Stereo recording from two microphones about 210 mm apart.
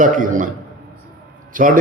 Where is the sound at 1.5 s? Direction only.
40° right (ahead or behind).